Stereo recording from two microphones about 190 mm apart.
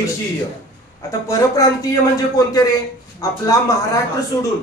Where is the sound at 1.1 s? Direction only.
15° left (ahead or behind).